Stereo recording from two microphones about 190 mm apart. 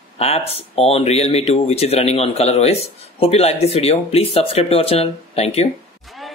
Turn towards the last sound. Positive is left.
turn(degrees=30)  # may be behind; listen again after turning